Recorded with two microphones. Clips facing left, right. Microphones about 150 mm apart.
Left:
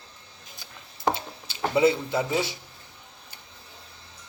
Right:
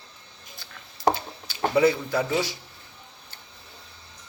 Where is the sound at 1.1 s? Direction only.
25° left (ahead or behind).